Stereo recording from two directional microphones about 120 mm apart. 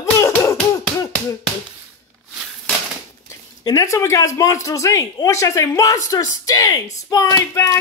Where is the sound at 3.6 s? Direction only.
25° left (ahead or behind).